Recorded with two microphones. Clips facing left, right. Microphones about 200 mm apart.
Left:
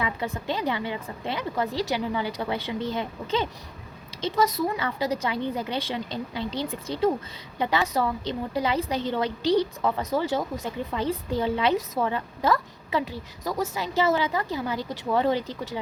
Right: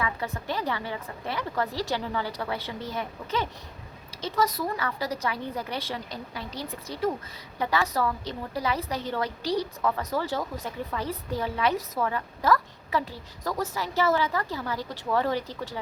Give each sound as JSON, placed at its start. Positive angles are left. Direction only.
{"t": 0.0, "sound": "a woman's voice", "side_deg": 20}